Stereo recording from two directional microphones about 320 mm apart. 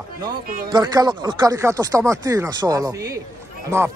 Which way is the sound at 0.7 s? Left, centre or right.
Centre.